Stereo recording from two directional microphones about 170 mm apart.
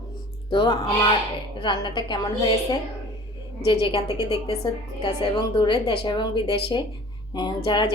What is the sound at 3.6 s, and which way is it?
A woman's voice, 30° left (ahead or behind).